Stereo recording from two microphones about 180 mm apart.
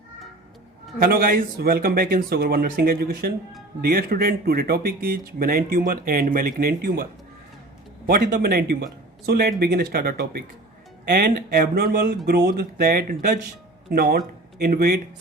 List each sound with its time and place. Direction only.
0.9 s speech: 55° right (ahead or behind)
8.0 s speech: 55° right (ahead or behind)